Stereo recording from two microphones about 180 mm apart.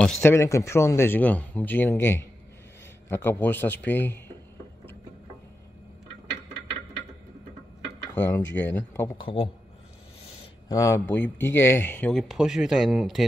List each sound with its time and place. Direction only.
0.0 s speech: 10° left (ahead or behind)
8.1 s speech: 10° left (ahead or behind)
9.2 s a man's voice: 30° left (ahead or behind)
10.7 s speech: 15° left (ahead or behind); by 13.2 s centre (ahead or behind)